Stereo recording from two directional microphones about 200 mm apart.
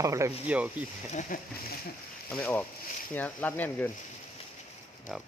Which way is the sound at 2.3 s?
10° left (ahead or behind).